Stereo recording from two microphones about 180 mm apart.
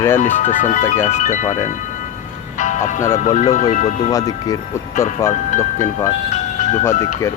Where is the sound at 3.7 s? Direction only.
45° left (ahead or behind).